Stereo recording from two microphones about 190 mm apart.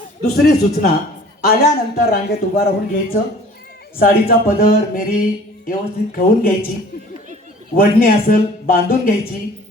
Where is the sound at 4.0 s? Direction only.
50° left (ahead or behind).